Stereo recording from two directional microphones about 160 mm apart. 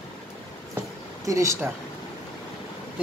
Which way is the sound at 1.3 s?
20° right (ahead or behind).